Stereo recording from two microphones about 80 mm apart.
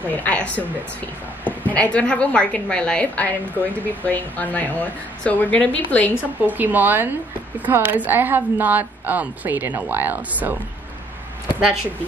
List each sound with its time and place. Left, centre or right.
0.1 s a woman's voice: centre
1.7 s a woman's voice: centre
6.1 s a woman's voice: right